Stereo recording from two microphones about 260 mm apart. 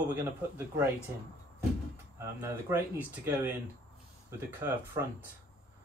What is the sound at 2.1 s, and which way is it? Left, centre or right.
Speech, centre.